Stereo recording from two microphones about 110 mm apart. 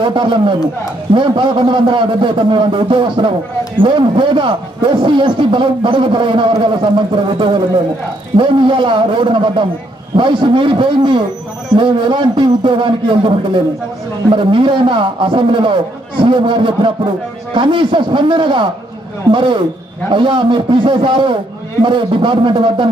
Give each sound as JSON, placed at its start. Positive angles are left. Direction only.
{"t": 0.0, "sound": "a man's voice", "side_deg": -45}